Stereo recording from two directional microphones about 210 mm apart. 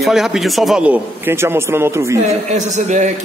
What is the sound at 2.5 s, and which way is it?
Speech, 35° right (ahead or behind).